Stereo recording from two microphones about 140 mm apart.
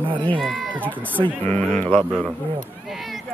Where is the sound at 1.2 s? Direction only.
45° right (ahead or behind).